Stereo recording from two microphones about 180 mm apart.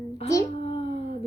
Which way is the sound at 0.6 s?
30° left (ahead or behind).